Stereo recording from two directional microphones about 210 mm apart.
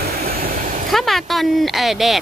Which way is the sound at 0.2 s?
45° right (ahead or behind).